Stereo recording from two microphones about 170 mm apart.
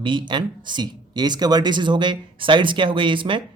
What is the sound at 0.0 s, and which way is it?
Speech, 25° right (ahead or behind).